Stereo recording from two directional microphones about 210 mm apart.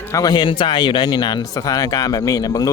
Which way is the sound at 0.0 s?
15° left (ahead or behind).